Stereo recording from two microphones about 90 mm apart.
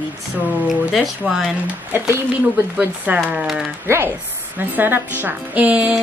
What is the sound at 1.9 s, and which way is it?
Speech, 30° right (ahead or behind).